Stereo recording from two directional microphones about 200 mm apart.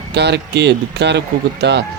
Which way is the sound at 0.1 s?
55° right (ahead or behind).